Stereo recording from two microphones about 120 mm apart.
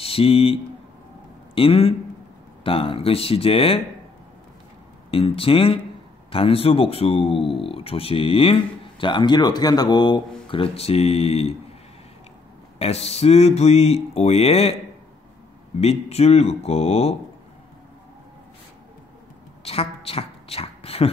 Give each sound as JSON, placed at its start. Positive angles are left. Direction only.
{"t": 0.0, "sound": "a man's voice", "side_deg": 55}
{"t": 5.1, "sound": "speech", "side_deg": 50}
{"t": 9.0, "sound": "speech", "side_deg": 40}
{"t": 12.7, "sound": "speech", "side_deg": 60}
{"t": 15.8, "sound": "speech", "side_deg": 60}
{"t": 19.6, "sound": "a sound", "side_deg": 55}